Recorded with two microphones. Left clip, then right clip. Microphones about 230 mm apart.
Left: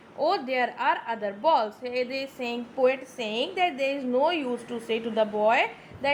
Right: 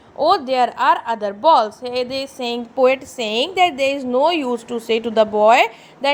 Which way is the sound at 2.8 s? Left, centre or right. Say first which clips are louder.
Right 8 dB; centre.